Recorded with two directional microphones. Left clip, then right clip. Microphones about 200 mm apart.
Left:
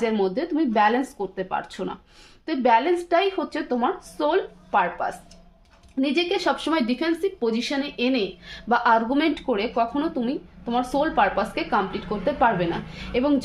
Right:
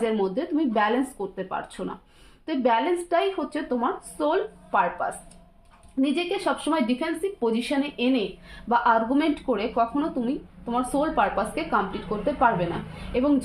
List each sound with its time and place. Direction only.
0.0 s speech: 30° left (ahead or behind)